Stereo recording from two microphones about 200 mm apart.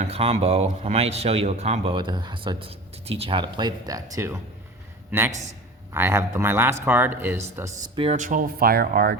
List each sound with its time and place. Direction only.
0.0 s a man's voice: 30° right (ahead or behind); by 7.4 s 10° right (ahead or behind)
7.9 s speech: 35° right (ahead or behind); by 9.1 s 50° right (ahead or behind)